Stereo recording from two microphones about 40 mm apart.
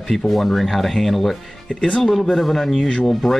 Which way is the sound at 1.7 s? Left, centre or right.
Centre.